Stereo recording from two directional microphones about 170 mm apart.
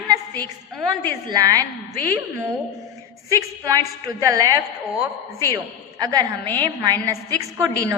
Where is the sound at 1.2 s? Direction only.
25° right (ahead or behind).